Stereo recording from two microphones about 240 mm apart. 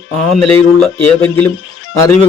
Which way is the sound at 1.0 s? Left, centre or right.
Centre.